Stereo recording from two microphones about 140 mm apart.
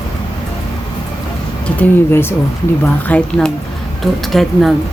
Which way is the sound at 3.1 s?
5° left (ahead or behind).